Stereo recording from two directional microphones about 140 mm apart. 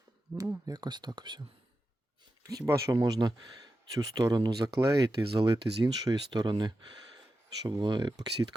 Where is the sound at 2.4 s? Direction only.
25° right (ahead or behind).